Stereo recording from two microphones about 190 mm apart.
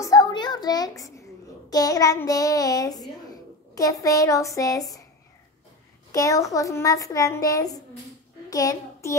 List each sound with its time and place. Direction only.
0.0 s a sound: 20° left (ahead or behind)
1.7 s child singing: 20° left (ahead or behind)
3.3 s a woman's voice: 20° left (ahead or behind)
6.1 s a child's voice: 15° left (ahead or behind)
8.5 s child singing: 20° left (ahead or behind)